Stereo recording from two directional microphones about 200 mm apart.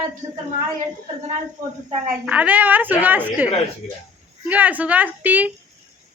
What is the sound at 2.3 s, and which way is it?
A woman's voice, 10° right (ahead or behind).